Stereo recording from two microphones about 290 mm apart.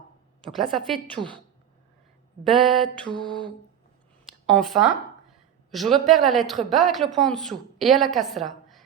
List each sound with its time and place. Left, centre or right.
0.4 s a woman's voice: centre
2.4 s a woman's voice: centre
4.4 s a woman's voice: centre